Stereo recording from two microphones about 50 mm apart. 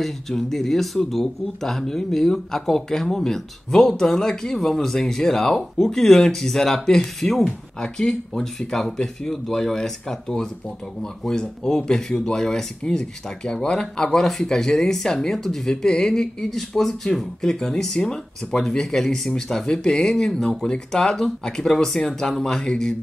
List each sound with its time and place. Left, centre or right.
0.0 s speech: centre